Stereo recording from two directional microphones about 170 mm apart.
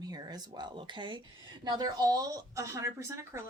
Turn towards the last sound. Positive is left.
turn(degrees=-15)  # may be behind; listen again after turning